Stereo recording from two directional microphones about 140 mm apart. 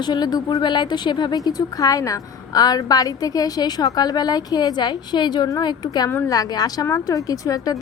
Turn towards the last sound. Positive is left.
turn(degrees=25)  # may be behind; listen again after turning